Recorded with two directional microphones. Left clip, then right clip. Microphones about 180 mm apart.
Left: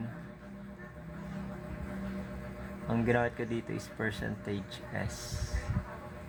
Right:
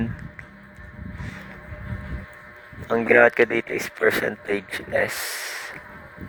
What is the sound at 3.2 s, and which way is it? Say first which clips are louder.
Speech: right 17 dB; 60° right (ahead or behind).